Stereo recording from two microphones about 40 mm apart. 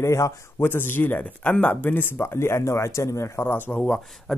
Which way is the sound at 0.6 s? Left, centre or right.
Left.